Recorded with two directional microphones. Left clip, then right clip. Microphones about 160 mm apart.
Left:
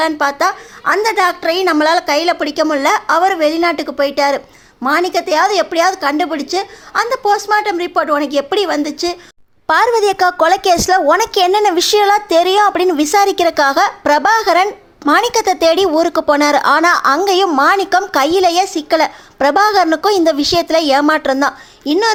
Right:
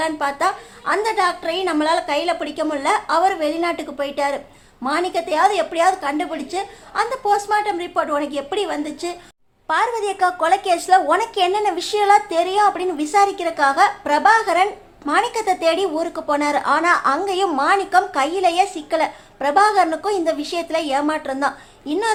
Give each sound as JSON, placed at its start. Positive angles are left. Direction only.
{"t": 0.0, "sound": "a woman's voice", "side_deg": 35}